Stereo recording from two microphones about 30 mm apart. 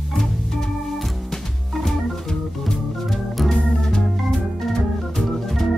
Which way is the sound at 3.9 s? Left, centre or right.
Centre.